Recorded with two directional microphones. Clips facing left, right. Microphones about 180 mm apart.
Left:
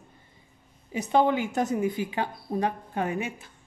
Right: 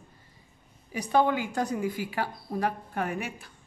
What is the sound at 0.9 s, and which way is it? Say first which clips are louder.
A woman's voice: left 2 dB; 20° left (ahead or behind).